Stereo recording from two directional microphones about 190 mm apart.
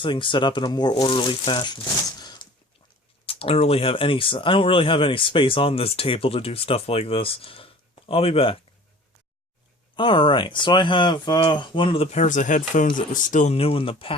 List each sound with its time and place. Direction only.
0.0 s speech: 25° left (ahead or behind)
3.2 s speech: 30° left (ahead or behind)
9.9 s speech: 25° left (ahead or behind)